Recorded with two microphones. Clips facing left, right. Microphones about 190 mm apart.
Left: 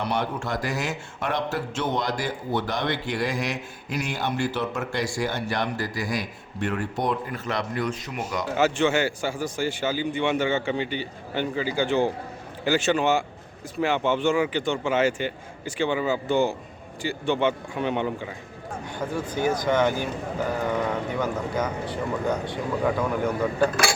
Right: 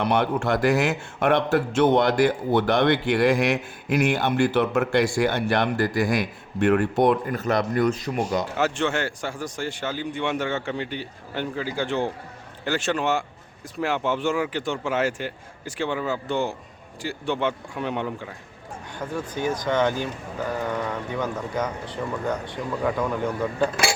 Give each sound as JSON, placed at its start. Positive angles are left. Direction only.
{"t": 0.0, "sound": "a man's voice", "side_deg": -55}
{"t": 7.3, "sound": "speech", "side_deg": -40}
{"t": 8.5, "sound": "speech", "side_deg": 0}
{"t": 21.2, "sound": "speech", "side_deg": 5}